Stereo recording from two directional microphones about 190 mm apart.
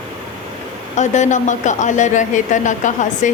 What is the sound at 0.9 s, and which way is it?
A woman's voice, 40° left (ahead or behind).